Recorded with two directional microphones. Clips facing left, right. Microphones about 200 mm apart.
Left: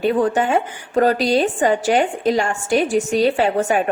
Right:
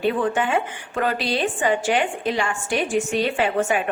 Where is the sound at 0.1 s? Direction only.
40° left (ahead or behind).